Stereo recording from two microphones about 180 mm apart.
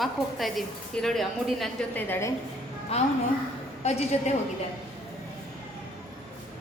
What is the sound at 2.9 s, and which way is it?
A woman's voice, 35° left (ahead or behind).